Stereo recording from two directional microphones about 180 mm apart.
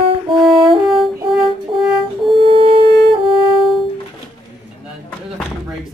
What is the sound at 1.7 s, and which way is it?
Music, 30° right (ahead or behind).